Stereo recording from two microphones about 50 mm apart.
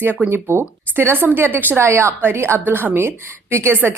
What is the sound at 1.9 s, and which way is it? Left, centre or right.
Speech, right.